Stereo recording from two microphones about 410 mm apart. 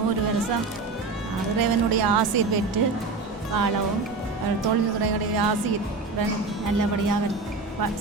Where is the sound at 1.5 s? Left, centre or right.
Right.